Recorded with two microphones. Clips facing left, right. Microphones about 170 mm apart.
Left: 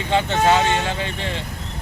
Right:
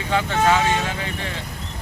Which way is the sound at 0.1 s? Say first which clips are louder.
Left 2 dB; 25° left (ahead or behind).